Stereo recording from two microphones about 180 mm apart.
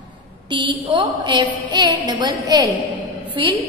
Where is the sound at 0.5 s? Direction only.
25° right (ahead or behind).